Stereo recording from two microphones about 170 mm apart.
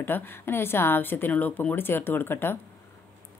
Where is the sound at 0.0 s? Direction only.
10° left (ahead or behind).